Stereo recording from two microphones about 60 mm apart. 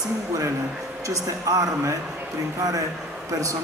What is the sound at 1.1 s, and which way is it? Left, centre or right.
Speech, right.